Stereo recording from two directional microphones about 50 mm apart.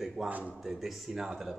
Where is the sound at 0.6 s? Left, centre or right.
Centre.